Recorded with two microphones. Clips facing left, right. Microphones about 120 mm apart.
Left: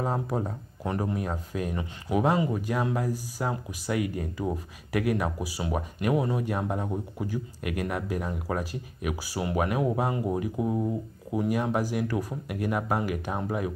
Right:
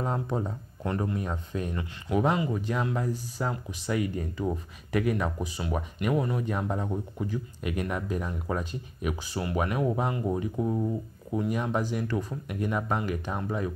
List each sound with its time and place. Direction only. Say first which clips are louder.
0.0 s speech: left 1 dB; 5° left (ahead or behind)
6.1 s speech: left 1 dB; 15° left (ahead or behind)
6.4 s speech: left 1 dB; 5° left (ahead or behind)